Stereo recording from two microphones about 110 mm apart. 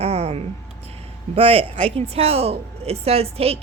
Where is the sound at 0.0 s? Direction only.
70° right (ahead or behind).